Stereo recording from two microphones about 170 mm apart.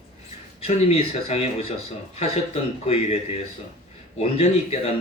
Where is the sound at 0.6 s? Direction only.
35° left (ahead or behind).